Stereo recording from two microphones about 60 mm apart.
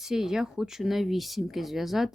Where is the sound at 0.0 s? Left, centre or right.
Centre.